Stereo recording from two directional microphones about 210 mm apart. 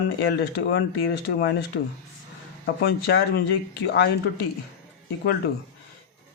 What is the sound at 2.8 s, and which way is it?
Speech, 50° left (ahead or behind).